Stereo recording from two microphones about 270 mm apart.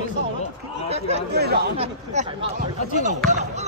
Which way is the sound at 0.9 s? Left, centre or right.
Right.